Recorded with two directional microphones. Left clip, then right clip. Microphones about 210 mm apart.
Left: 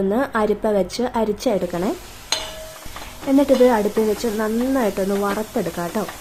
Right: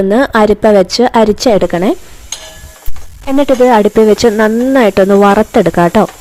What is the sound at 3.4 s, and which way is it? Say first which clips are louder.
Speech: right 8 dB; 40° right (ahead or behind).